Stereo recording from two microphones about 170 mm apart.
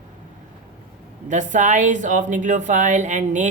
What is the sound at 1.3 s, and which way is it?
A woman's voice, 45° right (ahead or behind).